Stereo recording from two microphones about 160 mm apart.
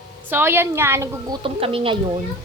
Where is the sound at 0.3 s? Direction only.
15° right (ahead or behind).